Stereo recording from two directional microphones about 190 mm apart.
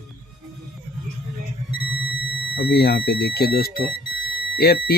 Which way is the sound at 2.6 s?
55° left (ahead or behind).